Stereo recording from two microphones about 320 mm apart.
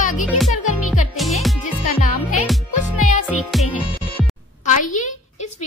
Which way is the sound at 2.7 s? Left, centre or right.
Left.